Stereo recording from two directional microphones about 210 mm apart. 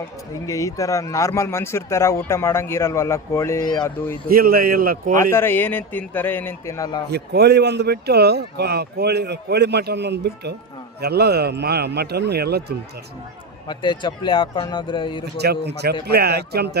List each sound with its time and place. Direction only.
0.4 s speech: 15° left (ahead or behind)
4.3 s speech: 45° right (ahead or behind)
5.3 s speech: 10° left (ahead or behind)
7.1 s speech: 50° right (ahead or behind)
13.7 s speech: 20° left (ahead or behind)
15.4 s speech: 50° right (ahead or behind)